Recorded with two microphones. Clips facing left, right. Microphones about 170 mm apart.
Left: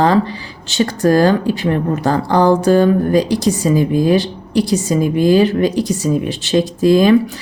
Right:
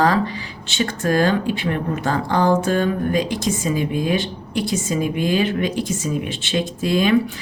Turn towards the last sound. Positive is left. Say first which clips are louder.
# left 7 dB
turn(degrees=40)  # may be behind; listen again after turning